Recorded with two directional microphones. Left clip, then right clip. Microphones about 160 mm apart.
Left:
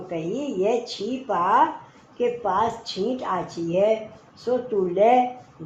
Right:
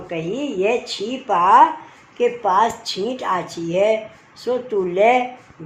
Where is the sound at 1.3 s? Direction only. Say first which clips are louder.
Right 7 dB; 45° right (ahead or behind).